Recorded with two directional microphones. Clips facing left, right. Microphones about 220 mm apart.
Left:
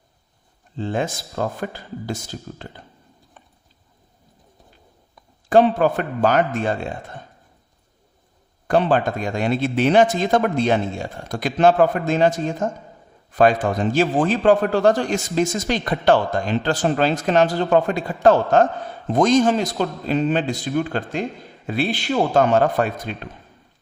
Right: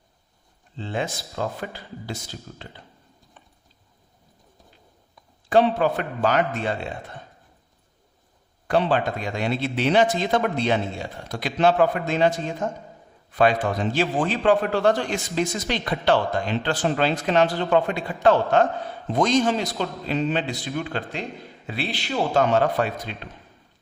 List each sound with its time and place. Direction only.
0.8 s a man's voice: 45° left (ahead or behind)
5.5 s a man's voice: 45° left (ahead or behind)
8.6 s a man's voice: 45° left (ahead or behind)